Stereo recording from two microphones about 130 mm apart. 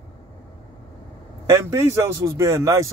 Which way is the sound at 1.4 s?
25° right (ahead or behind).